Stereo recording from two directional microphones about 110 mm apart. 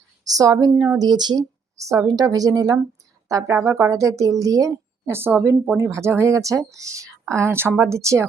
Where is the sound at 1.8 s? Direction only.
30° right (ahead or behind).